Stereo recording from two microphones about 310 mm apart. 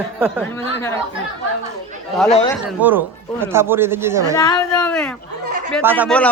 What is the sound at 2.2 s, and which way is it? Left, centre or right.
Speech, centre.